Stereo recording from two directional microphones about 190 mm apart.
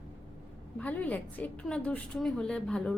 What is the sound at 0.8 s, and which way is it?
A woman's voice, 5° left (ahead or behind).